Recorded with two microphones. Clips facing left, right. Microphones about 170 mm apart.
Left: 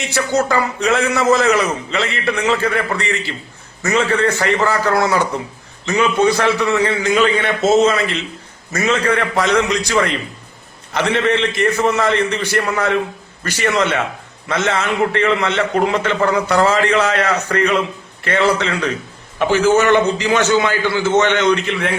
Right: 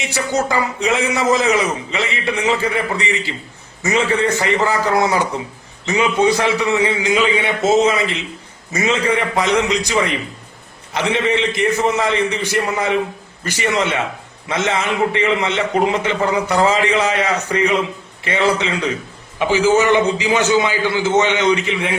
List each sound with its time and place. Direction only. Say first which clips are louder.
0.0 s a man's voice: left 2 dB; 15° right (ahead or behind)
19.5 s a man's voice: left 1 dB; 60° left (ahead or behind)
19.9 s a man's voice: left 1 dB; 15° right (ahead or behind)